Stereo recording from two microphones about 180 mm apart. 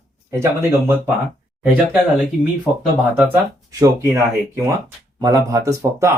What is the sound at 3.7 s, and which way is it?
Speech, 20° right (ahead or behind).